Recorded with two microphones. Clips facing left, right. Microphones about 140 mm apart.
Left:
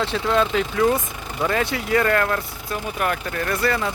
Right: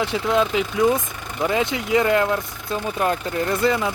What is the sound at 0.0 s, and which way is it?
Speech, 15° right (ahead or behind).